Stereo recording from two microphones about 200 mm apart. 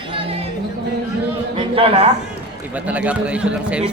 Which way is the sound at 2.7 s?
5° right (ahead or behind).